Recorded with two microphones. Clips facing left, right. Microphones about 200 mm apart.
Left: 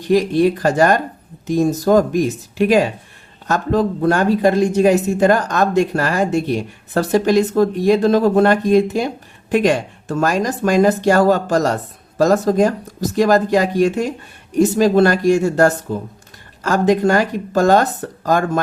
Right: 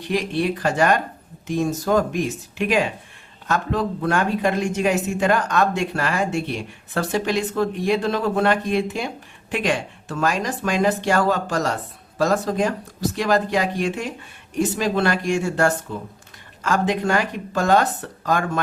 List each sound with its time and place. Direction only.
0.0 s speech: 40° left (ahead or behind)